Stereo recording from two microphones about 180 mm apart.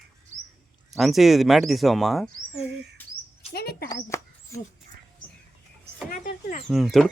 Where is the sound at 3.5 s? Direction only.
60° left (ahead or behind).